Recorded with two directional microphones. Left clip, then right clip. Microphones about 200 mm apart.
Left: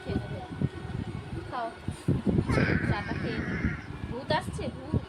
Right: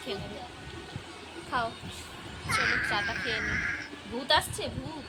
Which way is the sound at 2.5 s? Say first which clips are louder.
Right 6 dB; 30° left (ahead or behind).